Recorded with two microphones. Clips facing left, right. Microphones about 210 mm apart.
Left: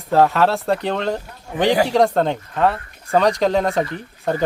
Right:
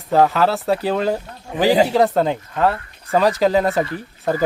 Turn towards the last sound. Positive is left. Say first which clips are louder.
# right 1 dB
turn(degrees=-5)  # may be behind; listen again after turning